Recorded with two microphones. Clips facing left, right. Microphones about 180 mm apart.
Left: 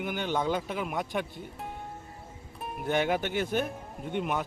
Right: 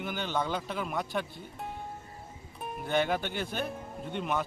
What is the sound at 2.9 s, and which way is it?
Speech, 15° left (ahead or behind).